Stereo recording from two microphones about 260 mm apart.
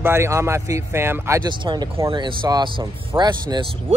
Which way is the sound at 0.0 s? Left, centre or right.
Centre.